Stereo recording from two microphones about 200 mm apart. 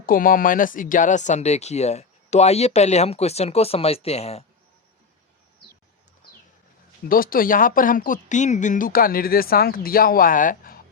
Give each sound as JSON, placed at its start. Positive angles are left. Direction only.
{"t": 0.0, "sound": "speech", "side_deg": 45}
{"t": 7.1, "sound": "speech", "side_deg": 45}